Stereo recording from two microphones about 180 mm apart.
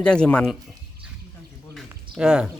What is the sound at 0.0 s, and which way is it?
Speech, 5° left (ahead or behind).